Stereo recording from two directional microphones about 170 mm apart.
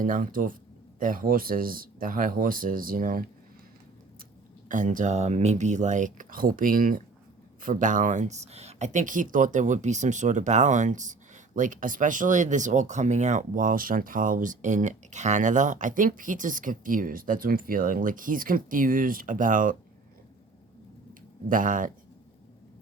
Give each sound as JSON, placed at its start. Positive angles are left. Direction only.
{"t": 0.0, "sound": "speech", "side_deg": -50}
{"t": 4.7, "sound": "speech", "side_deg": -50}
{"t": 21.1, "sound": "a sound", "side_deg": -50}